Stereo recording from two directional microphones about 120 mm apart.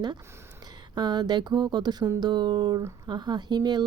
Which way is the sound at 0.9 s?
35° right (ahead or behind).